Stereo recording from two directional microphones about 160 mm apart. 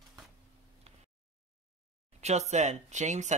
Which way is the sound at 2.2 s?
45° right (ahead or behind).